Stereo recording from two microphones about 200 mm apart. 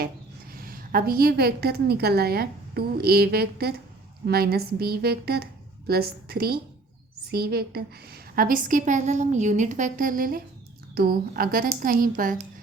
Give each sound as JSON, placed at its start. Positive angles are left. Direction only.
{"t": 0.5, "sound": "a woman's voice", "side_deg": -45}